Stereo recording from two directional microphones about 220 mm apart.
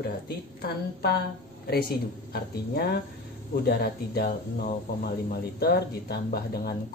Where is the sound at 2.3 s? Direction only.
45° left (ahead or behind).